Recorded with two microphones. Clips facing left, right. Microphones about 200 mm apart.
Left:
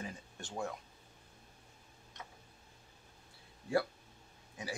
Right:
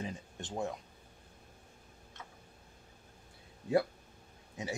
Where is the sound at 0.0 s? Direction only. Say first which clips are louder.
Right 4 dB; 20° right (ahead or behind).